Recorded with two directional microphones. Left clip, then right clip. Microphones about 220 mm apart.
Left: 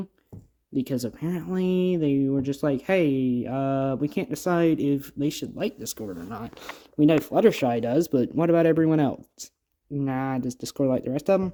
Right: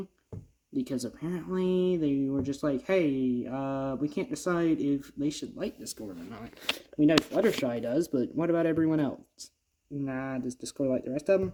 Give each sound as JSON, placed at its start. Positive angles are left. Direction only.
{"t": 0.7, "sound": "speech", "side_deg": 45}